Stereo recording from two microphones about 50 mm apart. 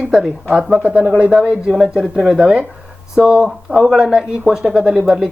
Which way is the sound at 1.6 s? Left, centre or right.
Centre.